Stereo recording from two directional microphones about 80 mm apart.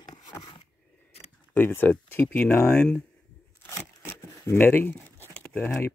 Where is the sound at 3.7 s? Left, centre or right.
Left.